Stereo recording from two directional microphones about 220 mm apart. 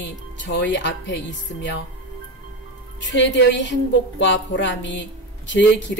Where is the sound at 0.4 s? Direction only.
55° left (ahead or behind).